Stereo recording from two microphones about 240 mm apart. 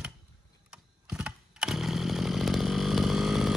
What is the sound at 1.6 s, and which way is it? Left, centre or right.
Chainsaw, centre.